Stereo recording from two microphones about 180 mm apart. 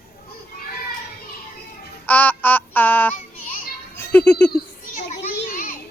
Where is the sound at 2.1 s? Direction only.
10° left (ahead or behind).